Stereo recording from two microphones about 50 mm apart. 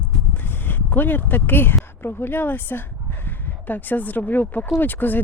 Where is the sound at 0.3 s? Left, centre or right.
Left.